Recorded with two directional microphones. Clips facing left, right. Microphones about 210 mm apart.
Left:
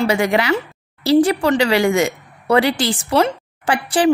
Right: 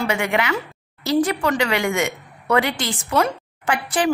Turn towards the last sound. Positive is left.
turn(degrees=30)  # may be behind; listen again after turning